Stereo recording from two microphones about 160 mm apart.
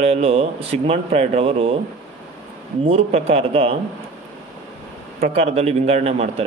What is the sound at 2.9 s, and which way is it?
Speech, 40° right (ahead or behind).